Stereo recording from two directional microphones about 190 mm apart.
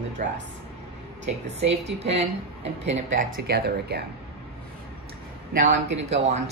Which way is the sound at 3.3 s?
55° right (ahead or behind).